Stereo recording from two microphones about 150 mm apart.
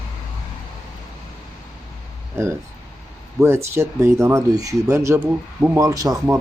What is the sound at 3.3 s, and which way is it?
Speech, 15° right (ahead or behind).